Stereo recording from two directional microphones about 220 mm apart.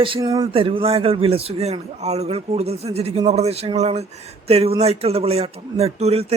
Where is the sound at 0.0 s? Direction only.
20° right (ahead or behind).